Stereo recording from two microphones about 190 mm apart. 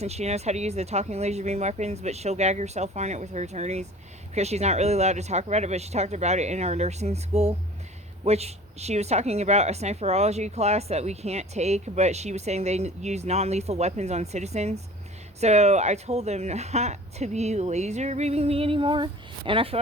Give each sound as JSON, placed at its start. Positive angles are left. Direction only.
{"t": 0.0, "sound": "a woman's voice", "side_deg": -35}